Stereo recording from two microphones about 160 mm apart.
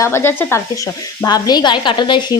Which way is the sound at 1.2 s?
25° left (ahead or behind).